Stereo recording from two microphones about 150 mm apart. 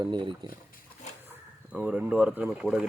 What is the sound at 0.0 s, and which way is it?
Speech, 30° right (ahead or behind).